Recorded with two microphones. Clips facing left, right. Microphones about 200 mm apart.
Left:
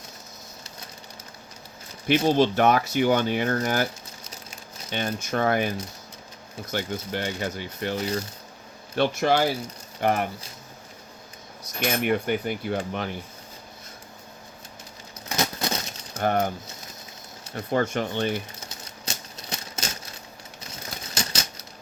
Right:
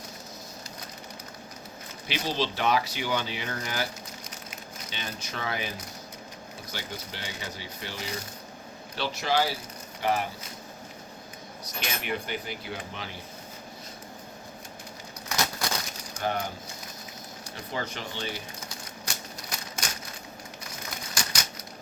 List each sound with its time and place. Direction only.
2.0 s speech: 50° left (ahead or behind)
4.9 s speech: 50° left (ahead or behind)
9.0 s speech: 55° left (ahead or behind)
11.8 s speech: 50° left (ahead or behind)
15.4 s a sound: 20° left (ahead or behind)
16.1 s speech: 55° left (ahead or behind)
17.5 s speech: 55° left (ahead or behind)
19.0 s typewriter: 25° left (ahead or behind)
21.2 s typewriter: 25° left (ahead or behind)